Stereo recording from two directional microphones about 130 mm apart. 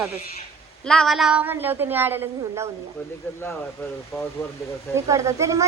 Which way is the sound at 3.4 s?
15° left (ahead or behind).